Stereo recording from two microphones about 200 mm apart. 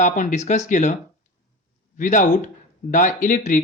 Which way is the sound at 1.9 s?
40° left (ahead or behind).